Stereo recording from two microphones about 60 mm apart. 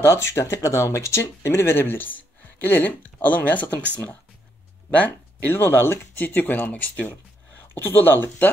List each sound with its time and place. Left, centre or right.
0.0 s speech: left
5.5 s speech: left